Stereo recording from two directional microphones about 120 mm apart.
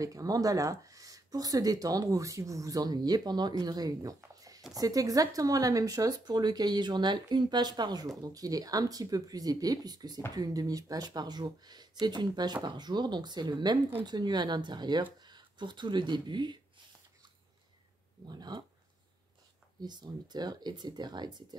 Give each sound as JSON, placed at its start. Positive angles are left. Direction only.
{"t": 0.0, "sound": "speech", "side_deg": -30}
{"t": 18.2, "sound": "speech", "side_deg": -35}
{"t": 19.8, "sound": "speech", "side_deg": -35}